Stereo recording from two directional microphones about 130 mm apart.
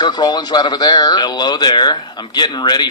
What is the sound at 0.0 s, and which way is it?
Speech, 35° left (ahead or behind).